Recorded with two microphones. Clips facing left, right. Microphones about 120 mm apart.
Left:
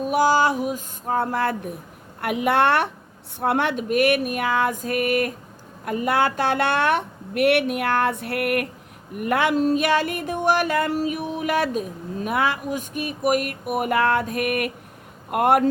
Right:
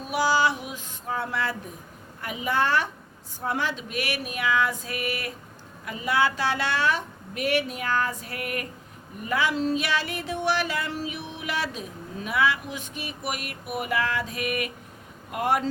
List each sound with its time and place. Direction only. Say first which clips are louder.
0.0 s female singing: left 5 dB; 50° left (ahead or behind)
2.2 s a woman's voice: left 7 dB; 65° left (ahead or behind)
3.4 s a sound: left 7 dB; 60° left (ahead or behind)
5.8 s a woman's voice: left 4 dB; 50° left (ahead or behind)
9.1 s a sound: left 6 dB; 65° left (ahead or behind)
15.3 s a woman's voice: left 7 dB; 55° left (ahead or behind)